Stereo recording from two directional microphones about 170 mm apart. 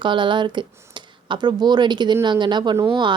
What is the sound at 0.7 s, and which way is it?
Speech, 15° right (ahead or behind).